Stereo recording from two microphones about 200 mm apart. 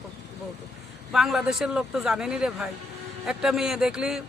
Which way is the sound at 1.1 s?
Centre (ahead or behind).